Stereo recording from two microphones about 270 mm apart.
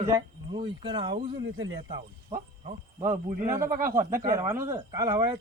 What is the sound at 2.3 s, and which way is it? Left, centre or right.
Speech, right.